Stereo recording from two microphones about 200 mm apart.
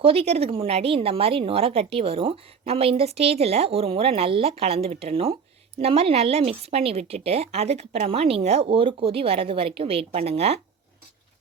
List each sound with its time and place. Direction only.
0.0 s speech: 30° right (ahead or behind)